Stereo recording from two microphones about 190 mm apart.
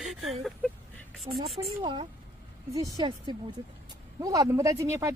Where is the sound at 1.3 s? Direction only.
30° right (ahead or behind).